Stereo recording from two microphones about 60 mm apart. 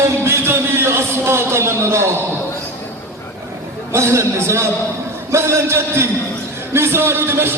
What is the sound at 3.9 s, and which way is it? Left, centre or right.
A man's voice, right.